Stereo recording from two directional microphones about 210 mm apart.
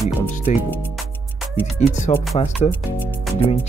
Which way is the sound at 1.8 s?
35° left (ahead or behind).